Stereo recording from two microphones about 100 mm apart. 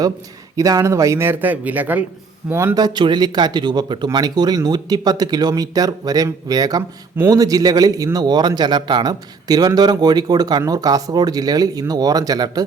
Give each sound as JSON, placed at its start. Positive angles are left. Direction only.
{"t": 0.5, "sound": "speech", "side_deg": -35}
{"t": 2.7, "sound": "a man's voice", "side_deg": -45}